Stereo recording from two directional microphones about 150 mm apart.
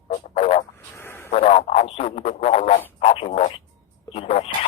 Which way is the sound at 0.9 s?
15° left (ahead or behind).